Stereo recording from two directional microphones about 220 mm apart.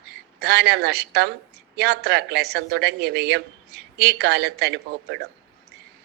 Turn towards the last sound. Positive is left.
turn(degrees=-50)  # may be behind; listen again after turning